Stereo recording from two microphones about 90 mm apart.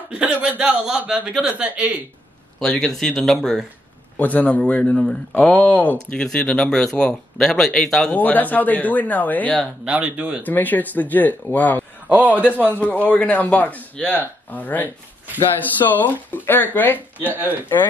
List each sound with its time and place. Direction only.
0.1 s a man's voice: 15° right (ahead or behind)
2.6 s speech: 5° left (ahead or behind)
4.2 s speech: 15° left (ahead or behind)
8.2 s speech: 20° left (ahead or behind)
9.8 s a man's voice: 15° right (ahead or behind)
10.4 s speech: 20° left (ahead or behind)
12.1 s a man's voice: 15° right (ahead or behind)
12.8 s speech: 15° left (ahead or behind)
17.2 s speech: 20° right (ahead or behind)